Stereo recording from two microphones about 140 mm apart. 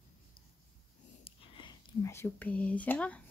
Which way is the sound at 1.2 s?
40° left (ahead or behind).